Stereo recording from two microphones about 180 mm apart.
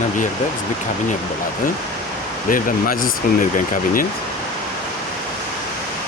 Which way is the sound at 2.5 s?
50° left (ahead or behind).